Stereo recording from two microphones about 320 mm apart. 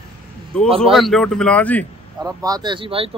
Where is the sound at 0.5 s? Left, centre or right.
Centre.